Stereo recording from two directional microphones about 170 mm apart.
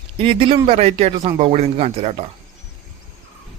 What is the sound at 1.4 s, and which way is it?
Speech, 40° right (ahead or behind).